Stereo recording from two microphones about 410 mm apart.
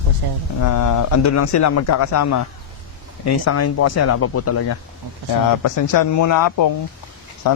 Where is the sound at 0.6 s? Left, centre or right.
Left.